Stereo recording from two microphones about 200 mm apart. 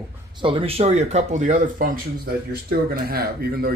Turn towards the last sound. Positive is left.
turn(degrees=-50)  # may be behind; listen again after turning